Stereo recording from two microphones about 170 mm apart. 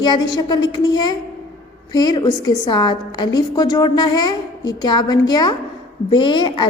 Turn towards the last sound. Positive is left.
turn(degrees=25)  # may be behind; listen again after turning